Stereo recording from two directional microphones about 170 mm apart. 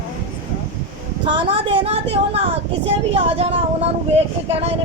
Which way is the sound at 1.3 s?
30° right (ahead or behind).